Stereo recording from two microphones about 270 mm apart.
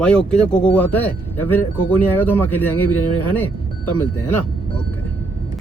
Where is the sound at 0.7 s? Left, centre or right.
Centre.